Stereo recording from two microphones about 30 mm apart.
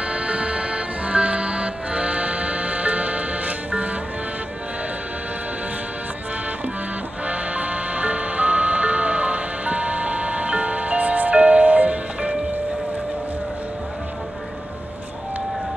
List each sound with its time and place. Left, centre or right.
0.0 s music: right
7.2 s music: right